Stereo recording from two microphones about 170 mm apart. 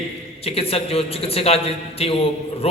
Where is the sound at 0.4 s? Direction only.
35° left (ahead or behind).